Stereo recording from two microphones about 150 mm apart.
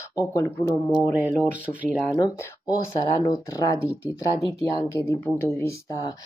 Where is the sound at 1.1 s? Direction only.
10° right (ahead or behind).